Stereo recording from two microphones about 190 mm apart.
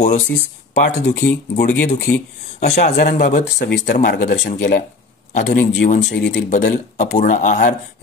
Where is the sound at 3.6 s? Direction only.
60° left (ahead or behind).